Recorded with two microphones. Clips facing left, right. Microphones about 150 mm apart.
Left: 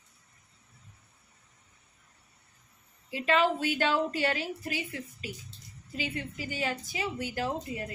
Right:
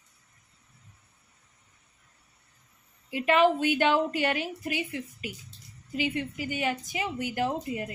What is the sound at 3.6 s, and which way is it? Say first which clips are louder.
A woman's voice: right 4 dB; 20° right (ahead or behind).